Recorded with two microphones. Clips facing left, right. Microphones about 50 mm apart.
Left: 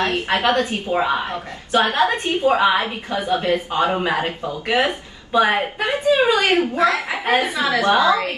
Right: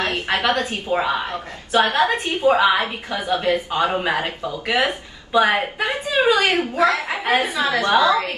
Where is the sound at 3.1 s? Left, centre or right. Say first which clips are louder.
Left 1 dB; left.